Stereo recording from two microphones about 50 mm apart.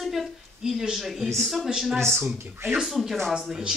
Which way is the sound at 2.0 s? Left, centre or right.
Right.